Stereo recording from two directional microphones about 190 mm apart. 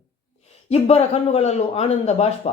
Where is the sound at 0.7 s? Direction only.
35° left (ahead or behind).